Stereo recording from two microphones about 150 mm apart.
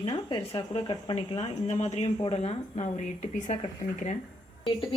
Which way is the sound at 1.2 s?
50° left (ahead or behind).